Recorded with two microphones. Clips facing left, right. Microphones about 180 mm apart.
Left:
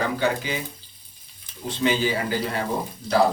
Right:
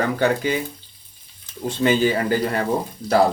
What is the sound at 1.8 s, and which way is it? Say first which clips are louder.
Speech: right 4 dB; 50° right (ahead or behind).